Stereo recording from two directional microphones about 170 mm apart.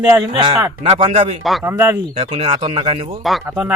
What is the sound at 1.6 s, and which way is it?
Speech, 15° right (ahead or behind).